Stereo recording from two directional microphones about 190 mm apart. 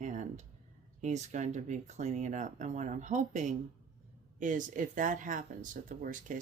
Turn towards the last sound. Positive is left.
turn(degrees=-45)  # may be behind; listen again after turning